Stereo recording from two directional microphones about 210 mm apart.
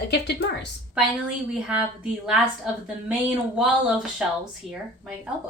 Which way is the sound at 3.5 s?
5° right (ahead or behind).